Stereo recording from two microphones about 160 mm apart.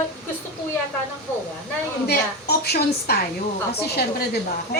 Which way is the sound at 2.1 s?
80° left.